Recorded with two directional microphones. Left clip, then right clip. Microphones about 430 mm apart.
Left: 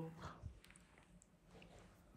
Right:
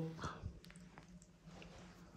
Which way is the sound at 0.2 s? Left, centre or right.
Centre.